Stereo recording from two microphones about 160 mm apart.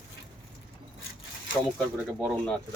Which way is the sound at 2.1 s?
Centre (ahead or behind).